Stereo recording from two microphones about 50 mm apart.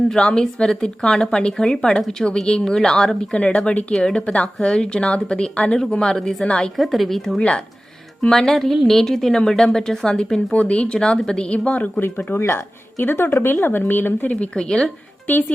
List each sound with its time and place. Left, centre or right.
0.2 s a woman's voice: centre
3.9 s a woman's voice: centre
6.7 s a woman's voice: centre
10.5 s speech: left
11.9 s a woman's voice: left
14.3 s speech: left
14.6 s a woman's voice: centre
15.3 s speech: left